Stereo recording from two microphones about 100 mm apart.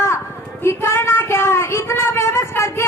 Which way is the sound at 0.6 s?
25° left (ahead or behind).